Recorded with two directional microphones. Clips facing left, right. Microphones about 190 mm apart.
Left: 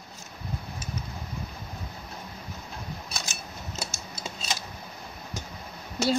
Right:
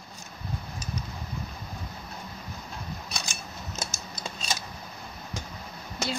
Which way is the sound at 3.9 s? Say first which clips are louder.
Even; 5° left (ahead or behind).